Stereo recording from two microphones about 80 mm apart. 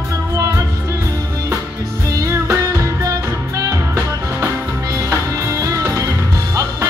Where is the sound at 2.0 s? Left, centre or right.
Right.